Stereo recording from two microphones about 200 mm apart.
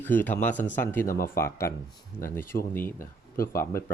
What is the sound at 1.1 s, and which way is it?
Speech, 45° left (ahead or behind).